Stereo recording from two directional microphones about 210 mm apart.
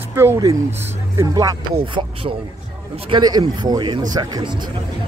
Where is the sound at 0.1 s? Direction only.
10° right (ahead or behind).